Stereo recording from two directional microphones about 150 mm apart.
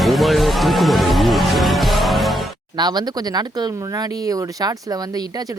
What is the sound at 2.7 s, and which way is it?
Speech, 30° right (ahead or behind).